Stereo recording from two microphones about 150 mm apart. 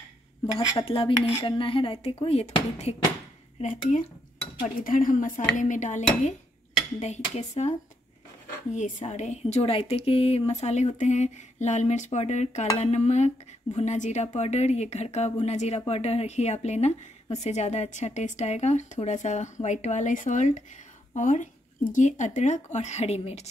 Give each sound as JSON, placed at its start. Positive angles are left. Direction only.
{"t": 0.6, "sound": "speech", "side_deg": 35}
{"t": 4.8, "sound": "a woman's voice", "side_deg": 65}
{"t": 8.7, "sound": "speech", "side_deg": 50}